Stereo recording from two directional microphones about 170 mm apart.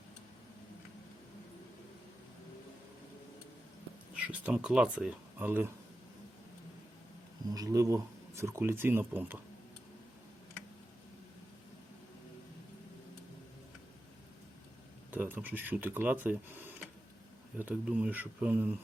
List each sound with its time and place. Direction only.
4.1 s speech: 5° right (ahead or behind)
7.5 s speech: 20° right (ahead or behind)
15.1 s speech: 10° right (ahead or behind)